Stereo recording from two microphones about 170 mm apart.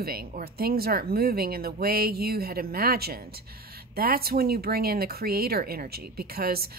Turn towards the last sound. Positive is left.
turn(degrees=-65)  # may be behind; listen again after turning